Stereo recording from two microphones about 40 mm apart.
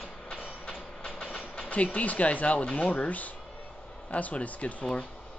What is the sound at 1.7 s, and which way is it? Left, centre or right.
Speech, left.